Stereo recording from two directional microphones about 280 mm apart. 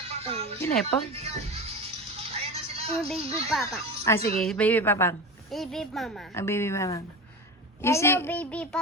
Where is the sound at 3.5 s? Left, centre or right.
Centre.